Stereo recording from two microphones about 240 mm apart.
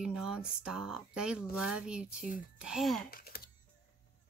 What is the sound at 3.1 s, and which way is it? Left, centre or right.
Typing, left.